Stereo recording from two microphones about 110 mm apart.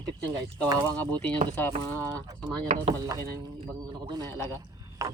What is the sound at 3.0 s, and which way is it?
Speech, 35° right (ahead or behind).